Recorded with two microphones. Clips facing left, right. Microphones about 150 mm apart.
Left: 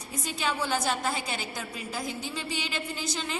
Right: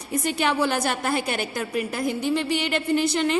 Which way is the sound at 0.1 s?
65° right (ahead or behind).